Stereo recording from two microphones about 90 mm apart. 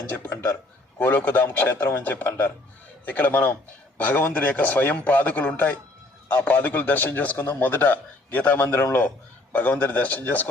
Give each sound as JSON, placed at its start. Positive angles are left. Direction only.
{"t": 0.9, "sound": "a man's voice", "side_deg": 20}